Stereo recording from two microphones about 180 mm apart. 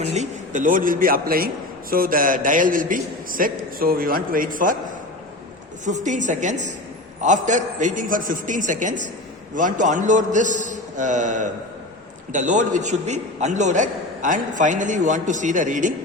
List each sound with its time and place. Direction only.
0.0 s a man's voice: 40° right (ahead or behind)
5.8 s a man's voice: 45° right (ahead or behind)